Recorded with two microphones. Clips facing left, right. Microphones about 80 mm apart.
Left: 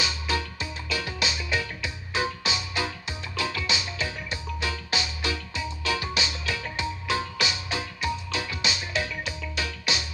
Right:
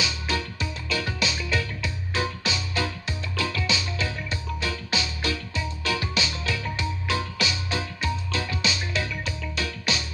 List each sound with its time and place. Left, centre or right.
0.0 s music: left